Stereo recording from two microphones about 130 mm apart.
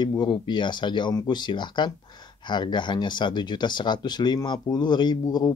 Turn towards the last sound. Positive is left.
turn(degrees=30)  # may be behind; listen again after turning